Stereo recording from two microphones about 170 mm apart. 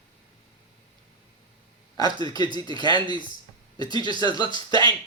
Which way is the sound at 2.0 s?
25° left (ahead or behind).